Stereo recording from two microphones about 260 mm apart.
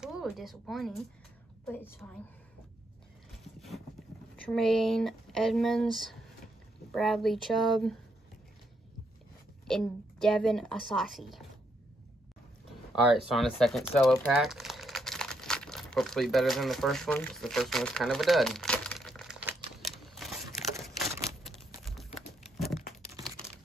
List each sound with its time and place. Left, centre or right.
0.0 s a woman's voice: centre
3.4 s boat: centre
4.5 s a woman's voice: centre
7.0 s a woman's voice: centre
9.7 s a woman's voice: centre
13.1 s crumpling: centre
21.3 s a sound: centre
22.6 s crumpling: centre